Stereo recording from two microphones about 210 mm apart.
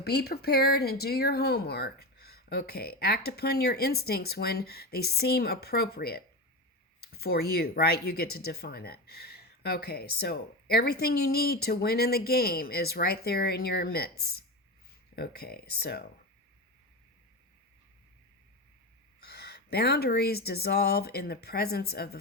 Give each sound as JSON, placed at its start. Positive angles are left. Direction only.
{"t": 0.0, "sound": "speech", "side_deg": 50}
{"t": 19.2, "sound": "speech", "side_deg": 50}